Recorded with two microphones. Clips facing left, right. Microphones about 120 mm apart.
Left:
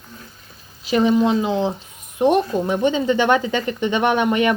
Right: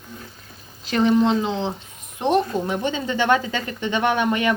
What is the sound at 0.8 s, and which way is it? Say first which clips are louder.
A woman's voice: left 1 dB; 10° left (ahead or behind).